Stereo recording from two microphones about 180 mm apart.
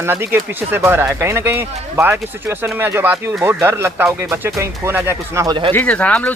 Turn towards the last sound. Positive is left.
turn(degrees=5)  # may be behind; listen again after turning